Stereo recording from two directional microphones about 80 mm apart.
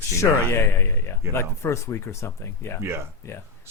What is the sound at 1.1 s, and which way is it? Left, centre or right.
Speech, left.